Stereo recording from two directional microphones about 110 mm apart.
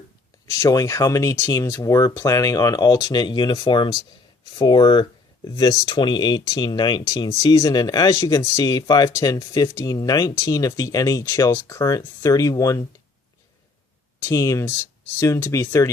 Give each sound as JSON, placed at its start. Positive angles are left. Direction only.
{"t": 0.6, "sound": "speech", "side_deg": 30}
{"t": 14.2, "sound": "speech", "side_deg": 25}